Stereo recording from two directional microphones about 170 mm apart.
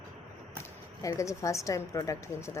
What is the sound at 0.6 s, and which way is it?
A woman's voice, 20° left (ahead or behind).